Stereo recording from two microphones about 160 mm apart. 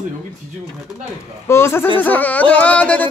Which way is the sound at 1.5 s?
15° left (ahead or behind).